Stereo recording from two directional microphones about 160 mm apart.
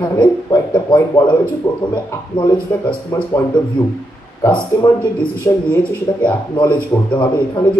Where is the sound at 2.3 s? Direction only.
30° left (ahead or behind).